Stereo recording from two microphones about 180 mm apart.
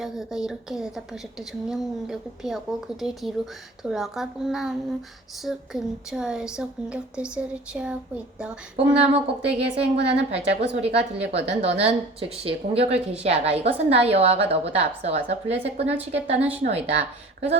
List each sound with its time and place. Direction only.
0.0 s a woman's voice: centre (ahead or behind)
8.7 s a woman's voice: 35° right (ahead or behind)